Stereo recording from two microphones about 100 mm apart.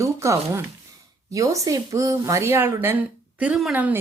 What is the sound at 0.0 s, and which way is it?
A woman's voice, 30° right (ahead or behind).